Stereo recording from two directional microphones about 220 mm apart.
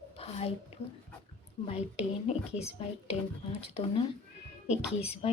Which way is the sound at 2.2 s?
30° left (ahead or behind).